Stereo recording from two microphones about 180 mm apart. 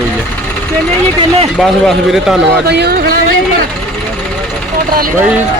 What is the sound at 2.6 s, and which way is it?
Speech, 65° right (ahead or behind).